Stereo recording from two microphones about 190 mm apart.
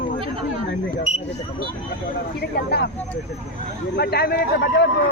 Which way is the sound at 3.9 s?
55° left (ahead or behind).